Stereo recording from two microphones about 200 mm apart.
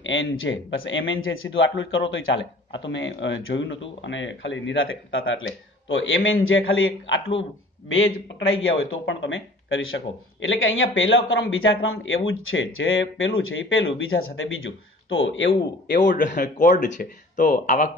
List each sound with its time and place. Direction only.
0.0 s speech: 70° left (ahead or behind)
16.0 s speech: 40° left (ahead or behind)